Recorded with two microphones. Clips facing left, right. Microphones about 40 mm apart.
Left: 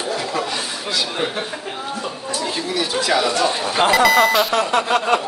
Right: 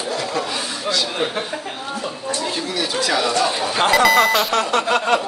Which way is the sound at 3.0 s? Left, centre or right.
Centre.